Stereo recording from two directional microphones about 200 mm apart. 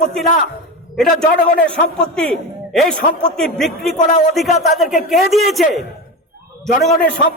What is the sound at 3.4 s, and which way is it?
A man's voice, centre (ahead or behind).